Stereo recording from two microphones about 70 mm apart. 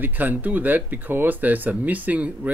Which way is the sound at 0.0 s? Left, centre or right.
Right.